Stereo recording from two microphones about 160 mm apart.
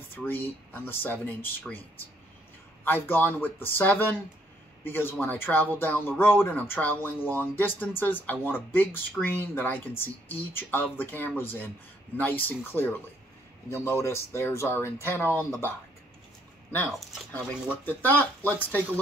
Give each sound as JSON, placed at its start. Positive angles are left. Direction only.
{"t": 0.1, "sound": "speech", "side_deg": 15}
{"t": 2.8, "sound": "speech", "side_deg": 10}
{"t": 17.8, "sound": "speech", "side_deg": 10}